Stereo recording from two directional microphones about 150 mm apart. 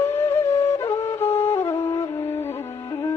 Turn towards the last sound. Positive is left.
turn(degrees=15)  # may be behind; listen again after turning